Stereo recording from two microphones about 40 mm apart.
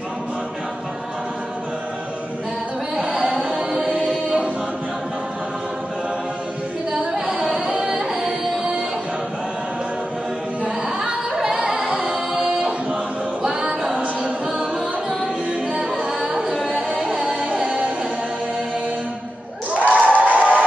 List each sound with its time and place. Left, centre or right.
3.0 s music: right
3.8 s a capella: right
7.2 s music: right
11.8 s singing: right
12.1 s singing: centre
13.9 s a capella: right
16.2 s singing: centre
17.5 s music: right
19.9 s a sound: right